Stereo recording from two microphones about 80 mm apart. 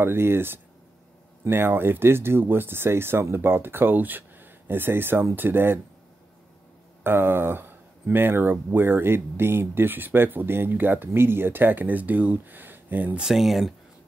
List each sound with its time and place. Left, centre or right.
0.0 s speech: right
7.0 s speech: right
13.2 s speech: centre